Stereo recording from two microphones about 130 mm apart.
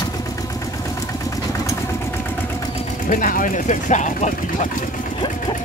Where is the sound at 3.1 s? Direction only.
90° left; by 4.7 s 70° left (ahead or behind).